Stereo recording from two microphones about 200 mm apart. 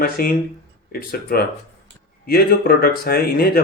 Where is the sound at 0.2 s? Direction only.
50° left (ahead or behind).